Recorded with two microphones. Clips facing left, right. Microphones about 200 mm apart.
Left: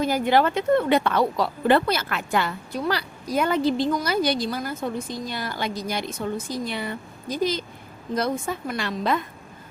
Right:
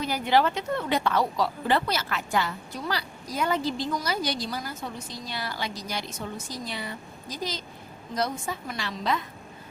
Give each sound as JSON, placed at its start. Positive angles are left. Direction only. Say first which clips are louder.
{"t": 0.0, "sound": "a woman's voice", "louder": "left 4 dB", "side_deg": 50}